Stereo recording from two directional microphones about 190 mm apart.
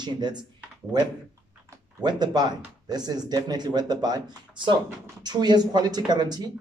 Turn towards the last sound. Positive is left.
turn(degrees=-20)  # may be behind; listen again after turning